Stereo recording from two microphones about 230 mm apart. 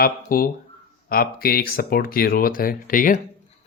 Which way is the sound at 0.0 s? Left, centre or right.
Left.